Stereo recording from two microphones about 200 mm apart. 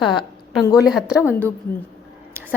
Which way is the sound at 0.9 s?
5° right (ahead or behind).